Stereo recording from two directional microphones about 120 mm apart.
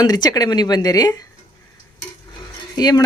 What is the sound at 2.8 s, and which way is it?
Speech, 35° left (ahead or behind).